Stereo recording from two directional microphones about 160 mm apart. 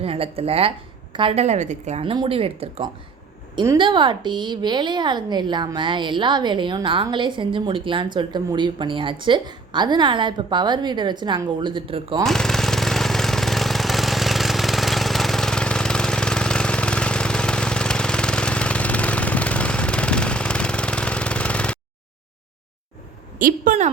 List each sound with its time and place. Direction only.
0.0 s a woman's voice: 35° right (ahead or behind)
12.2 s jackhammer: 5° left (ahead or behind)
23.4 s a woman's voice: 60° right (ahead or behind)